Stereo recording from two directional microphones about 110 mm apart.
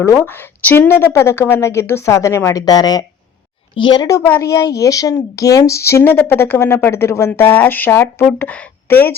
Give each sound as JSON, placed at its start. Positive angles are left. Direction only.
{"t": 0.0, "sound": "a woman's voice", "side_deg": 25}
{"t": 4.4, "sound": "a woman's voice", "side_deg": 30}